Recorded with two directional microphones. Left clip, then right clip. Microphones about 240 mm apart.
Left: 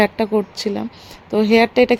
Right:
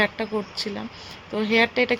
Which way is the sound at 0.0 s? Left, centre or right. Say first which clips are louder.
Left 7 dB; left.